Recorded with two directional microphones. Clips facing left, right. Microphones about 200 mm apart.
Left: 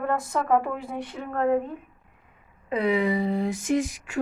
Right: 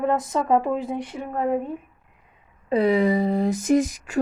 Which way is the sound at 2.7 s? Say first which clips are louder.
Right 4 dB; 35° right (ahead or behind).